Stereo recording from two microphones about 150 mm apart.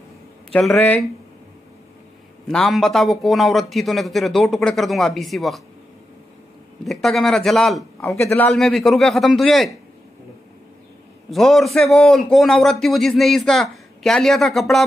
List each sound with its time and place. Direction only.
0.5 s a man's voice: 5° left (ahead or behind)
2.4 s a man's voice: 5° left (ahead or behind)
6.9 s a man's voice: centre (ahead or behind)
8.3 s a man's voice: 15° left (ahead or behind)
8.5 s a man's voice: centre (ahead or behind)
11.2 s a man's voice: centre (ahead or behind)